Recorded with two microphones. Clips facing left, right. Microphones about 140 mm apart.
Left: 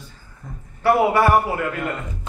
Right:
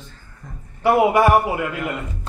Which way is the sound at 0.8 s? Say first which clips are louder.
Right 1 dB; 15° right (ahead or behind).